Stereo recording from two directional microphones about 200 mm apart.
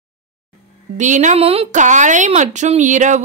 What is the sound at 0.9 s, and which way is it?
Speech, 35° right (ahead or behind).